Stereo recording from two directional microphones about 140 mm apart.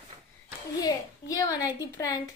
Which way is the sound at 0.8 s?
25° left (ahead or behind).